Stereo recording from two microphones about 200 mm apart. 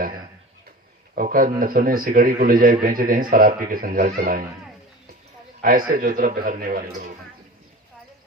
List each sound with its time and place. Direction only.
1.1 s a man's voice: 45° right (ahead or behind)
5.6 s a man's voice: 45° right (ahead or behind)